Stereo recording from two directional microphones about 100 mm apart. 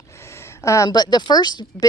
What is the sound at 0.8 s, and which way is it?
Speech, 45° left (ahead or behind).